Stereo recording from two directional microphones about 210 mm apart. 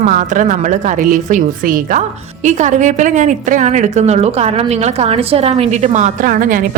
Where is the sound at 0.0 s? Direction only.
35° right (ahead or behind).